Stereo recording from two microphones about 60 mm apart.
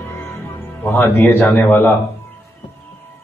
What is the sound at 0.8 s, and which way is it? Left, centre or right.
Speech, left.